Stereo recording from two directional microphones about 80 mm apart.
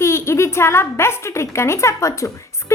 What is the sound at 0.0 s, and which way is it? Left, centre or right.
A woman's voice, left.